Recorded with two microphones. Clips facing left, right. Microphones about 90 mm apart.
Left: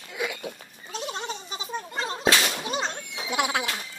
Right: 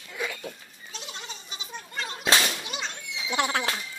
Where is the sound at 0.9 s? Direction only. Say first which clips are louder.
Left 9 dB; 45° left (ahead or behind).